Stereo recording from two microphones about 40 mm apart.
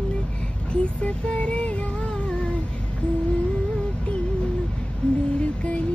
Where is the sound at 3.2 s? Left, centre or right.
Left.